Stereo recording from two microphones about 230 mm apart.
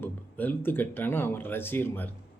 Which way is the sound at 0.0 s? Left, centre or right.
Centre.